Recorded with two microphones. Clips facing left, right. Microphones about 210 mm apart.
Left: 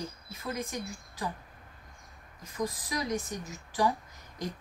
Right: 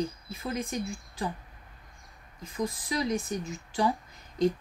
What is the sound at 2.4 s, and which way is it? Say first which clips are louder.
Speech: right 2 dB; 25° right (ahead or behind).